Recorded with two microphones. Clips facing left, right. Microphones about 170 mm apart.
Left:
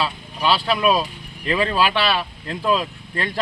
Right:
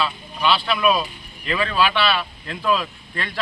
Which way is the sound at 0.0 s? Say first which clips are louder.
Even; 40° left (ahead or behind).